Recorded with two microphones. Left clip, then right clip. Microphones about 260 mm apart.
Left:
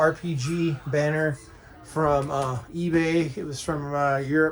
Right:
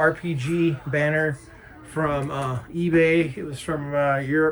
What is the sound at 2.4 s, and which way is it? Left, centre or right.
Speech, centre.